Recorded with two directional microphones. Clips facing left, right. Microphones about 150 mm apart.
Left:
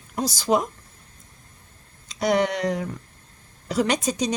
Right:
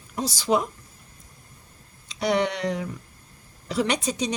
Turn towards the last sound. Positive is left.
turn(degrees=45)  # may be behind; listen again after turning